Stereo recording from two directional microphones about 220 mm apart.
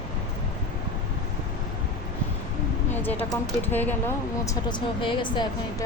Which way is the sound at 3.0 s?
10° left (ahead or behind).